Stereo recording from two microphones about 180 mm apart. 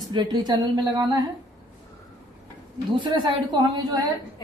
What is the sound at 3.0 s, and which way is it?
A woman's voice, 25° right (ahead or behind).